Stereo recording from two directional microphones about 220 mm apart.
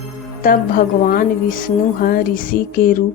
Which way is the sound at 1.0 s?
40° left (ahead or behind).